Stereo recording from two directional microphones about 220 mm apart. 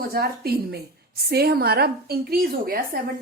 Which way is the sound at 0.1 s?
45° right (ahead or behind).